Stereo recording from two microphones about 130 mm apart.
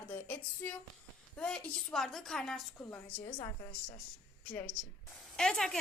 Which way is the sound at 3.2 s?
35° left (ahead or behind).